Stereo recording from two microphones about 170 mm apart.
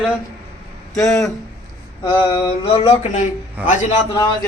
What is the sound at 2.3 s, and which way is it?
Mantra, 30° left (ahead or behind).